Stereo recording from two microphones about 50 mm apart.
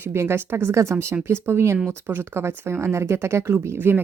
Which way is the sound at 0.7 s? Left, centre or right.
Right.